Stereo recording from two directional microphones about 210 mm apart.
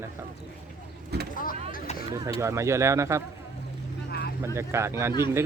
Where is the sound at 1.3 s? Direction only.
40° left (ahead or behind).